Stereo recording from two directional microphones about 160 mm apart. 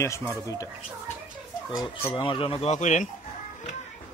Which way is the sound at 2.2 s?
30° left (ahead or behind).